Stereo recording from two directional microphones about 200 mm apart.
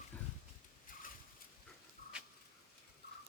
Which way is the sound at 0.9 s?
45° left (ahead or behind).